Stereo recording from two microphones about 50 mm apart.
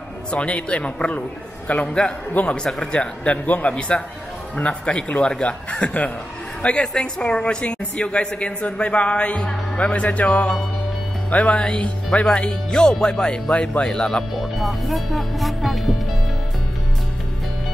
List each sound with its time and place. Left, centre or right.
0.3 s a woman's voice: left
3.4 s a man's voice: left
4.6 s a woman's voice: left
13.8 s speech: centre
14.3 s speech: centre